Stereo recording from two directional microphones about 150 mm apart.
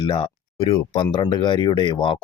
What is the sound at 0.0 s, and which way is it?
Speech, 35° left (ahead or behind).